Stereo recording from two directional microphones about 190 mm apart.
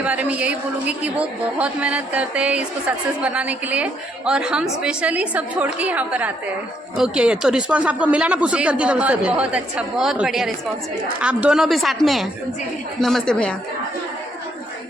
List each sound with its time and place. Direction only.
0.0 s a woman's voice: 10° right (ahead or behind)